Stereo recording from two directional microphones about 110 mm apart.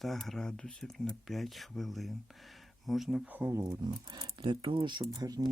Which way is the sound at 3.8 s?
40° right (ahead or behind).